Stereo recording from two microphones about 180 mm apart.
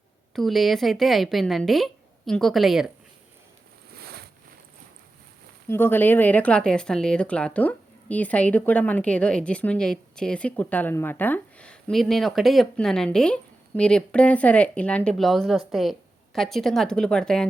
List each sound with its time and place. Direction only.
0.3 s speech: centre (ahead or behind)
4.0 s a sound: 60° right (ahead or behind)
5.6 s speech: 10° left (ahead or behind)